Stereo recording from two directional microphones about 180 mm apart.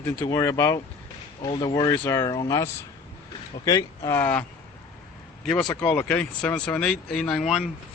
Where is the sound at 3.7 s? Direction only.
15° left (ahead or behind).